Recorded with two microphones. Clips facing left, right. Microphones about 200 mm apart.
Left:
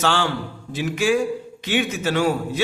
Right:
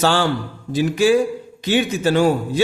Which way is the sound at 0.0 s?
35° right (ahead or behind).